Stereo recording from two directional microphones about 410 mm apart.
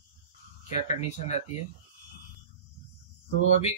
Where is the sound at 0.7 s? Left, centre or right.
Centre.